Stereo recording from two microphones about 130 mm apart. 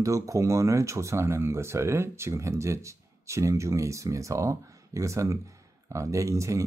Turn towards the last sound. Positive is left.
turn(degrees=-25)  # may be behind; listen again after turning